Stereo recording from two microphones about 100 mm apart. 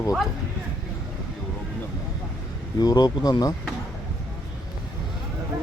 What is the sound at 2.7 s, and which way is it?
Speech, 45° left (ahead or behind).